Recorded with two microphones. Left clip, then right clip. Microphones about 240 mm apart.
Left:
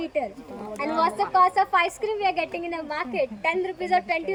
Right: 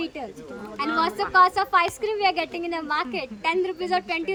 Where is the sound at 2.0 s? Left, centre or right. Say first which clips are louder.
Right 1 dB; centre.